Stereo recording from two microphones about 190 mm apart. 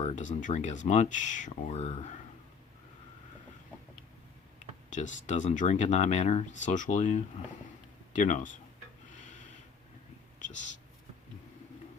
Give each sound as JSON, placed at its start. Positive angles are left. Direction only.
{"t": 0.0, "sound": "speech", "side_deg": 40}
{"t": 4.9, "sound": "speech", "side_deg": 40}
{"t": 9.1, "sound": "a sound", "side_deg": 40}
{"t": 10.4, "sound": "whispering", "side_deg": 40}